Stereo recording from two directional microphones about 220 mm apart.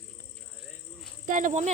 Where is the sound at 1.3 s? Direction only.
35° right (ahead or behind).